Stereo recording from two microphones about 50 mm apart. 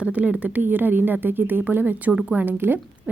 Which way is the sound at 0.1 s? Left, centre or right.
Right.